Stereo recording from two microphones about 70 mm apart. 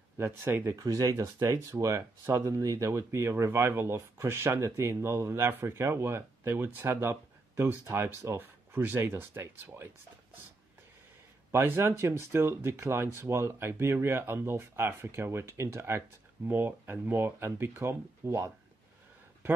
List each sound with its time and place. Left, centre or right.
0.2 s speech: right
0.8 s speech: right
2.9 s speech: right
11.5 s speech: right